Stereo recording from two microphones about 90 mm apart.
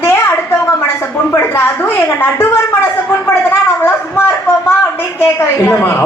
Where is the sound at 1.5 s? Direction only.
25° left (ahead or behind).